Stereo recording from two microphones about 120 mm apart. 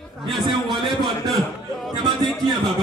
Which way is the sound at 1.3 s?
Centre (ahead or behind).